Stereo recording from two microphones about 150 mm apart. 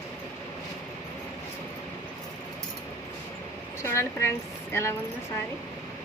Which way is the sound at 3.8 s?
20° left (ahead or behind).